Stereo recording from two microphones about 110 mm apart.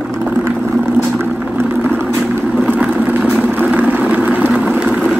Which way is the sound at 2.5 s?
10° right (ahead or behind).